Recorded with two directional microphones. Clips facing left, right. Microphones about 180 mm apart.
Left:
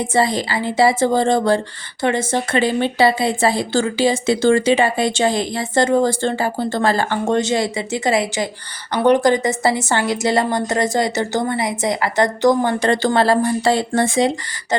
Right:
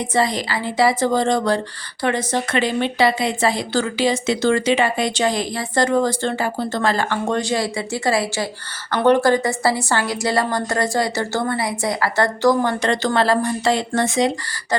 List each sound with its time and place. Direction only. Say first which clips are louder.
0.0 s speech: left 2 dB; 30° left (ahead or behind)